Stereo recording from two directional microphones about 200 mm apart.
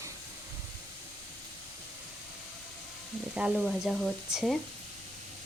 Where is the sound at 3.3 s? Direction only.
5° right (ahead or behind).